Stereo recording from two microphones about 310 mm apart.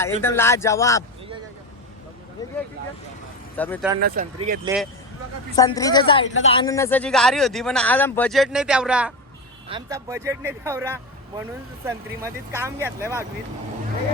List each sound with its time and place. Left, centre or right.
0.0 s speech: centre
2.4 s speech: centre
3.6 s speech: centre
4.0 s speech: right
5.5 s speech: centre